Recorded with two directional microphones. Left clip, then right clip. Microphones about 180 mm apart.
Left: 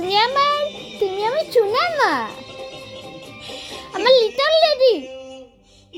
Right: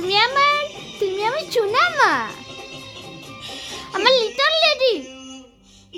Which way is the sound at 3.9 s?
10° left (ahead or behind).